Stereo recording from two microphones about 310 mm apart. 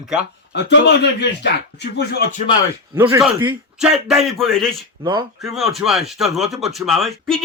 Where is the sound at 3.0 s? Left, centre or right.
Centre.